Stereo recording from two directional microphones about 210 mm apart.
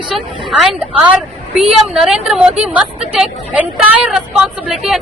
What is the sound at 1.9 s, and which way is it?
Speech, centre (ahead or behind).